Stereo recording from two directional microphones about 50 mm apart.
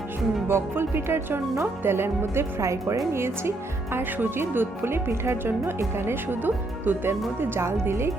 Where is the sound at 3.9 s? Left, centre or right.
Right.